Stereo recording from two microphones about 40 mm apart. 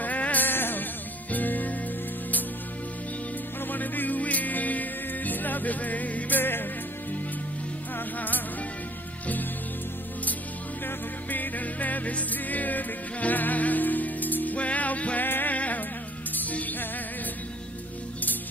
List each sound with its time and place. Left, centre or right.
0.0 s music: left
0.5 s music: left
1.3 s music: left
3.7 s music: left
6.4 s music: left
11.2 s music: left
15.2 s music: left
15.5 s insect: left
16.3 s music: left